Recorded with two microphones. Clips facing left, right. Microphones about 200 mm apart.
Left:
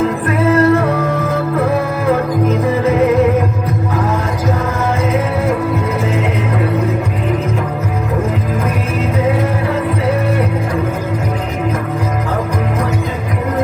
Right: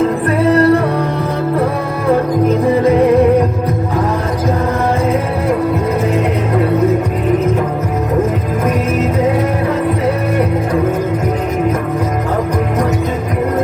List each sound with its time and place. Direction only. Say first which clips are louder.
0.3 s music: right 1 dB; 35° right (ahead or behind)